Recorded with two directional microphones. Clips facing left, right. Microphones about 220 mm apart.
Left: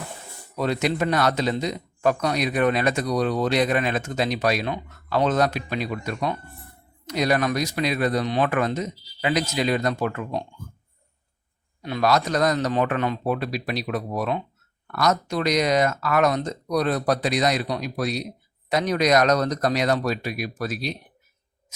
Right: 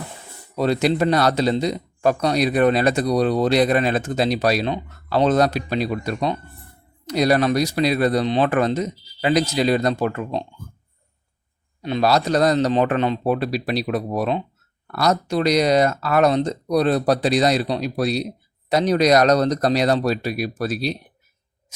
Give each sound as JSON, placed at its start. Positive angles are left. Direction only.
{"t": 0.5, "sound": "speech", "side_deg": -35}
{"t": 11.8, "sound": "speech", "side_deg": -25}